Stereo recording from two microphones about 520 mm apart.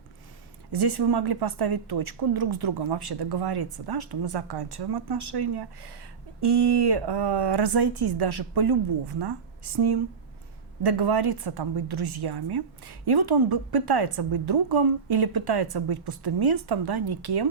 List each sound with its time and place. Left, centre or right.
0.7 s speech: right